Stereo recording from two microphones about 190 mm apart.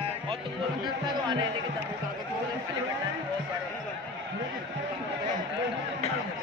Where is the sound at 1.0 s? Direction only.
25° right (ahead or behind).